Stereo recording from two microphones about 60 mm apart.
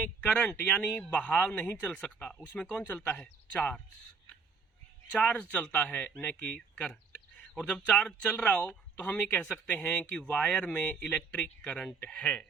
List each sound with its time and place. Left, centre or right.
0.2 s speech: centre
2.7 s speech: left
3.2 s speech: left
5.2 s speech: left